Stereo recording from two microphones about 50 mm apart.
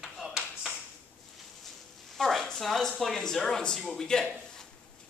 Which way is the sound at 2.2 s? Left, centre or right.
Centre.